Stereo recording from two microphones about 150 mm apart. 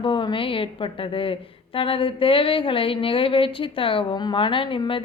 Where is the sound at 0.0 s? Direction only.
35° left (ahead or behind).